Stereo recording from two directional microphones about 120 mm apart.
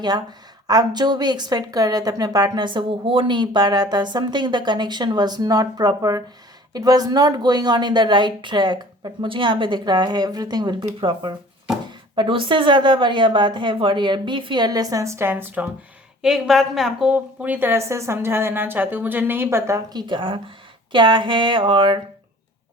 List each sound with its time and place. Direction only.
0.0 s a woman's voice: 35° right (ahead or behind); by 15.7 s 15° right (ahead or behind)
16.2 s a woman's voice: centre (ahead or behind); by 20.4 s 45° right (ahead or behind)
20.9 s a sound: 40° right (ahead or behind)